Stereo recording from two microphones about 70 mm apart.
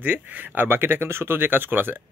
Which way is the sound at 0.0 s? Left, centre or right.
Right.